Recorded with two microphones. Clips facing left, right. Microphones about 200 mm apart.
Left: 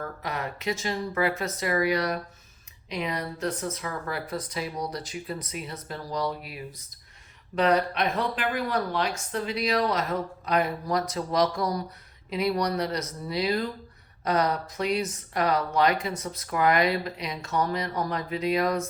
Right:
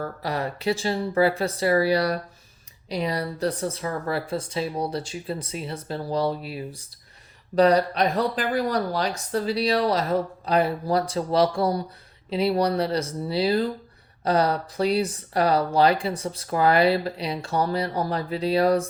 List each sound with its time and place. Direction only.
0.0 s speech: 35° right (ahead or behind)